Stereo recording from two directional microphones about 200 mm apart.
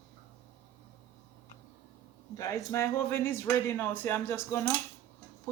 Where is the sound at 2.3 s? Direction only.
15° left (ahead or behind).